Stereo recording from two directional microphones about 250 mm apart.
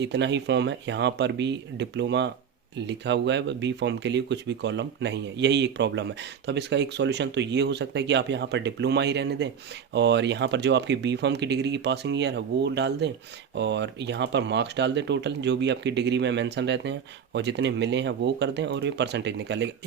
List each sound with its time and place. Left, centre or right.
0.0 s speech: right